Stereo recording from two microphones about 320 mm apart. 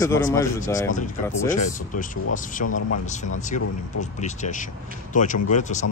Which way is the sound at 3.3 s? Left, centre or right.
Left.